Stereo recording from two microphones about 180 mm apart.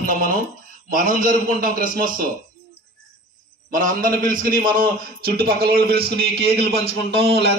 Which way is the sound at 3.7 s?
50° right (ahead or behind).